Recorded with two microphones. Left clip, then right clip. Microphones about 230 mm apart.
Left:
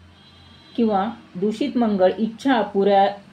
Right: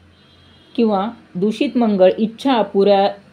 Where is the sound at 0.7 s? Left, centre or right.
Right.